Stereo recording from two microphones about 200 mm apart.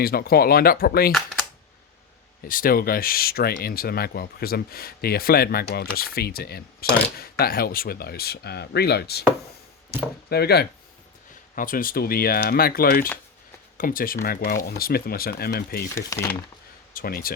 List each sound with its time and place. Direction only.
0.0 s speech: 50° left (ahead or behind)
2.4 s speech: 45° left (ahead or behind)
10.2 s speech: 55° left (ahead or behind)
11.5 s speech: 45° left (ahead or behind)
16.0 s speech: 15° left (ahead or behind)
16.9 s speech: 45° left (ahead or behind)